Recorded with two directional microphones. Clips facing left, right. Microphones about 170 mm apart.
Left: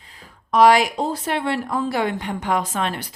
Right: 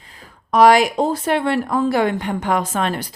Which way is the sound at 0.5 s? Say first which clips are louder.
Right 2 dB; 45° right (ahead or behind).